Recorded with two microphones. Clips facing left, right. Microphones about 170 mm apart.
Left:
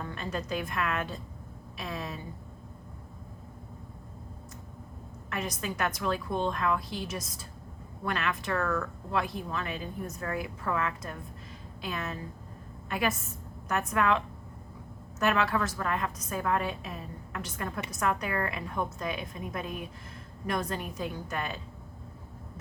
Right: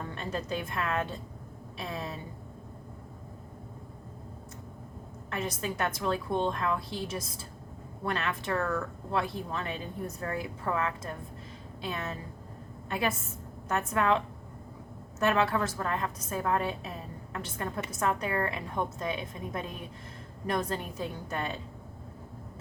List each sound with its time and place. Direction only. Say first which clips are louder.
0.1 s speech: even; 30° right (ahead or behind)
5.3 s speech: right 1 dB; 30° right (ahead or behind)
15.2 s speech: right 1 dB; 30° right (ahead or behind)